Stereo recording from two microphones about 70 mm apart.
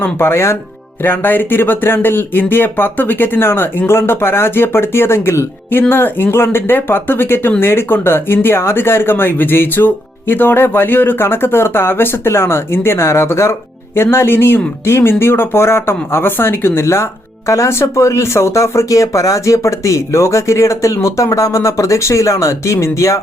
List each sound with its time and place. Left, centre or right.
0.0 s speech: left